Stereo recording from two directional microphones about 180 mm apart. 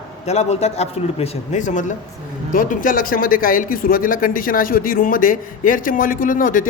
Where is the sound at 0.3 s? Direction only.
35° left (ahead or behind).